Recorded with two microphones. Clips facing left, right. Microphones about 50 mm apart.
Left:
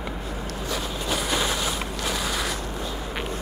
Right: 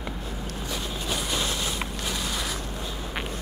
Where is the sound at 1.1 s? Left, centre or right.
Centre.